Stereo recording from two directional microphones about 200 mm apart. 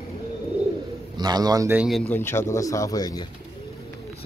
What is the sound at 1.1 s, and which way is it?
Speech, 20° right (ahead or behind).